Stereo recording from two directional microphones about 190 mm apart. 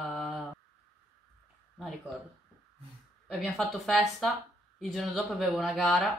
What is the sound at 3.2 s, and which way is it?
Speech, centre (ahead or behind).